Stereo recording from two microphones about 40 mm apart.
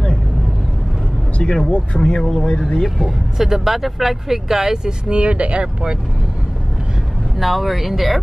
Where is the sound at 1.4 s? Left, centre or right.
Left.